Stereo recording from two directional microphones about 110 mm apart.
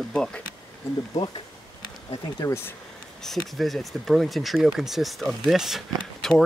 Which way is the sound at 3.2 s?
5° left (ahead or behind).